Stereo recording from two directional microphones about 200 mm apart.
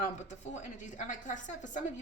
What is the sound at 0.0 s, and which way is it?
A woman's voice, 35° left (ahead or behind).